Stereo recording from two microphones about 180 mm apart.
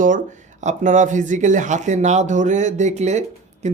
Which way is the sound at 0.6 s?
40° right (ahead or behind).